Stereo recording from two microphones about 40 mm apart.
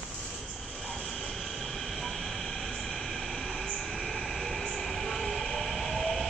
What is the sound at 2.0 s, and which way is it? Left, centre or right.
Train, centre.